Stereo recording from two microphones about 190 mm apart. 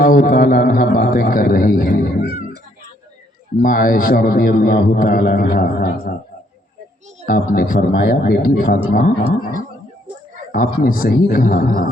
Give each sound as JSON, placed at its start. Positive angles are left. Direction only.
{"t": 0.0, "sound": "a man's voice", "side_deg": 45}
{"t": 2.2, "sound": "meow", "side_deg": -30}
{"t": 3.6, "sound": "a man's voice", "side_deg": 50}
{"t": 7.3, "sound": "a man's voice", "side_deg": 50}
{"t": 10.5, "sound": "a man's voice", "side_deg": 50}